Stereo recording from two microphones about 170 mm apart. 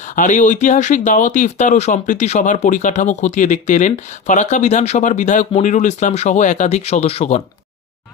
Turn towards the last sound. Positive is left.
turn(degrees=35)  # may be behind; listen again after turning